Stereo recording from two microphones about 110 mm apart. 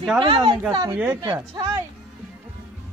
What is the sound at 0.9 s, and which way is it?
Speech, 15° right (ahead or behind).